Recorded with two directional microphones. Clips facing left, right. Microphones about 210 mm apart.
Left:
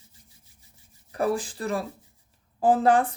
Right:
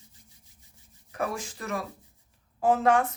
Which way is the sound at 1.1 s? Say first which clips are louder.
Left 6 dB; 35° left (ahead or behind).